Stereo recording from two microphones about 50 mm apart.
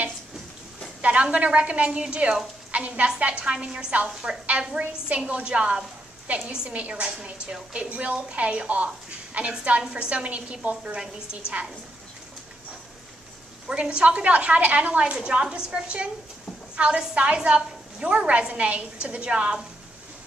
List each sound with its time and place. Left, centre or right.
1.0 s a woman's voice: right
13.7 s a woman's voice: right